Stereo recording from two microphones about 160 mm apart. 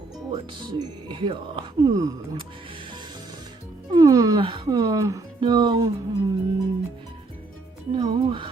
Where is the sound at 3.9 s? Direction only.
20° right (ahead or behind).